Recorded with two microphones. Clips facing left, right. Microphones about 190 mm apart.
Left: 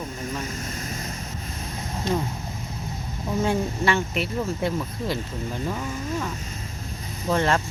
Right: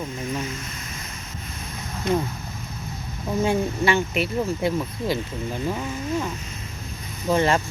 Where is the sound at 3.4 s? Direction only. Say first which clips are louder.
Right 2 dB; 10° right (ahead or behind).